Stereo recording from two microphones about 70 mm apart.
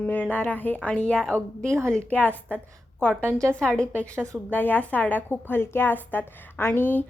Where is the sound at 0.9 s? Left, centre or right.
Centre.